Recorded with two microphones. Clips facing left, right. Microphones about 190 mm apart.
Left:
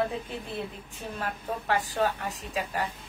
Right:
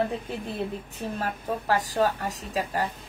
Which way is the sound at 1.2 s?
40° right (ahead or behind).